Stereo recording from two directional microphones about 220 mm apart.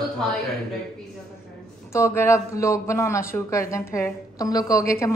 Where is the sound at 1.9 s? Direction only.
10° left (ahead or behind).